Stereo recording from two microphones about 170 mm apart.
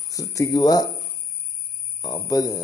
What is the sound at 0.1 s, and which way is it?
Speech, 20° left (ahead or behind).